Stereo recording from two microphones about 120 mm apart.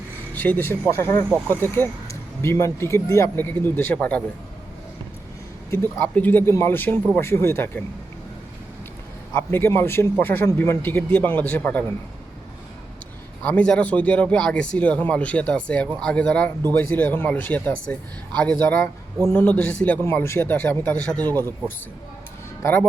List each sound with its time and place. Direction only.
0.3 s a man's voice: 15° left (ahead or behind)
5.7 s a man's voice: 15° left (ahead or behind)
9.3 s a man's voice: 15° left (ahead or behind)
13.4 s a man's voice: 10° left (ahead or behind)
22.6 s a man's voice: 15° left (ahead or behind)